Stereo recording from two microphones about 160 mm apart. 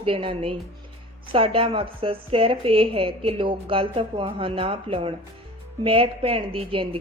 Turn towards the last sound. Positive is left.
turn(degrees=-35)  # may be behind; listen again after turning